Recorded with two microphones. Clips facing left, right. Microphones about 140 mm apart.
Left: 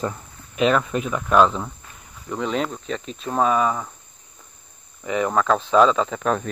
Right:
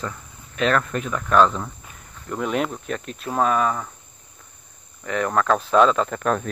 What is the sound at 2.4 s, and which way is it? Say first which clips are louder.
Speech: right 1 dB; 5° right (ahead or behind).